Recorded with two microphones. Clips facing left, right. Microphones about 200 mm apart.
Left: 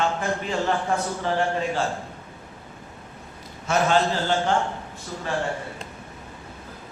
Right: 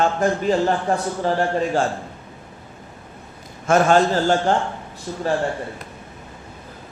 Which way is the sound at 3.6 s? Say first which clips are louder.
Right 6 dB; 50° right (ahead or behind).